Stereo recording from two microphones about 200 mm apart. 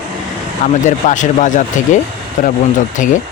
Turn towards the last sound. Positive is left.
turn(degrees=40)  # may be behind; listen again after turning